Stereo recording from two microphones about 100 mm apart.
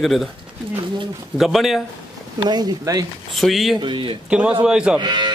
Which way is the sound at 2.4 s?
45° right (ahead or behind).